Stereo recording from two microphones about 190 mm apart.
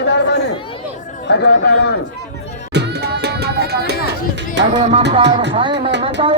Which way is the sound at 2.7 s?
60° right (ahead or behind).